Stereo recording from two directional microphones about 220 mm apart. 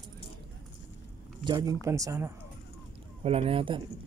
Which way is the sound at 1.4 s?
20° right (ahead or behind).